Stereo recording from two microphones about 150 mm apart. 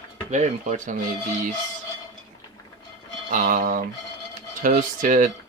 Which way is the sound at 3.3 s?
65° right (ahead or behind).